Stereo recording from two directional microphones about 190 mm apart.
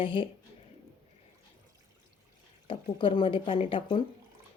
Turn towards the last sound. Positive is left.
turn(degrees=25)  # may be behind; listen again after turning